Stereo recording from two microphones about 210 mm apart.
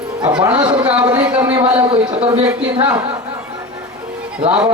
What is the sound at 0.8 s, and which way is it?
A man's voice, 5° right (ahead or behind).